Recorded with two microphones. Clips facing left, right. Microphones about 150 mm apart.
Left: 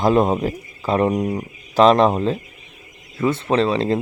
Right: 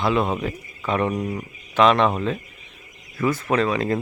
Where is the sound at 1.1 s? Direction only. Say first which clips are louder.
Left 5 dB; 20° left (ahead or behind).